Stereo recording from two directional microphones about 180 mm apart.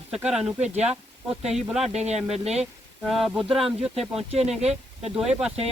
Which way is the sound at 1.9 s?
40° right (ahead or behind).